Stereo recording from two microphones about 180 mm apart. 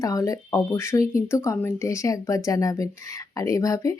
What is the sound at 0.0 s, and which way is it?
Speech, 20° left (ahead or behind).